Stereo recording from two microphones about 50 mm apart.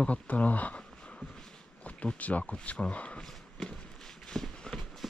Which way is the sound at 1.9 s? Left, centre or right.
Left.